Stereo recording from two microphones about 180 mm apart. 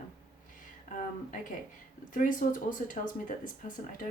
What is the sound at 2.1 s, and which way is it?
Speech, 50° left (ahead or behind).